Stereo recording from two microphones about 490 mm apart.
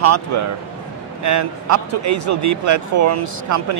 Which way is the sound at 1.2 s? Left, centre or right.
Right.